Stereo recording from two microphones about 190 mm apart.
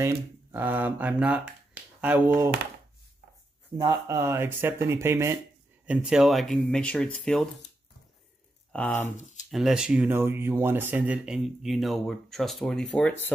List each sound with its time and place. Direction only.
0.0 s speech: 10° right (ahead or behind)
3.7 s speech: 20° right (ahead or behind); by 7.4 s 5° left (ahead or behind)
8.7 s speech: 10° left (ahead or behind)
9.1 s a sound: 40° left (ahead or behind)
9.5 s speech: centre (ahead or behind)